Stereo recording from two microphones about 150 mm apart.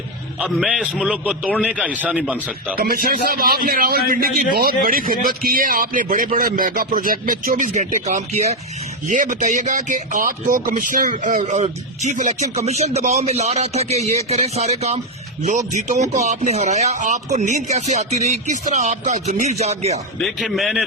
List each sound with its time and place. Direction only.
0.3 s a man's voice: 5° right (ahead or behind)
2.7 s a man's voice: 75° right (ahead or behind); by 8.5 s 45° right (ahead or behind)
9.0 s a man's voice: 60° right (ahead or behind)
20.1 s a man's voice: 5° left (ahead or behind)